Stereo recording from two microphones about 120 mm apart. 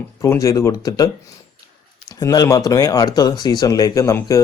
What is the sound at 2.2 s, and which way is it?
Speech, 25° left (ahead or behind).